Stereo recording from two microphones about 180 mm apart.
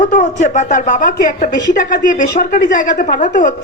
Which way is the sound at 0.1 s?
40° left (ahead or behind).